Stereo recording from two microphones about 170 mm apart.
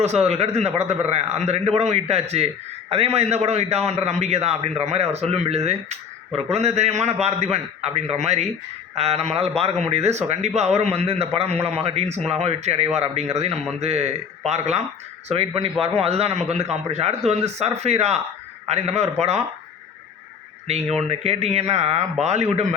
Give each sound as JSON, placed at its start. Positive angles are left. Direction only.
{"t": 0.0, "sound": "a man's voice", "side_deg": -40}
{"t": 20.7, "sound": "a man's voice", "side_deg": -40}